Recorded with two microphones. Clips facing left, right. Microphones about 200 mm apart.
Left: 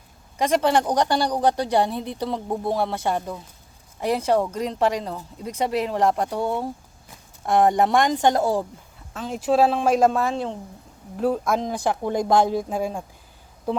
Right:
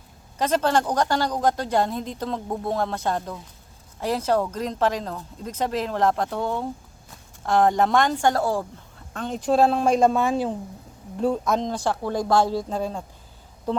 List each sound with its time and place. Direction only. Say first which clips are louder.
0.3 s speech: left 2 dB; 10° left (ahead or behind)
9.1 s a woman's voice: left 1 dB; 5° left (ahead or behind)
11.2 s speech: even; 5° left (ahead or behind)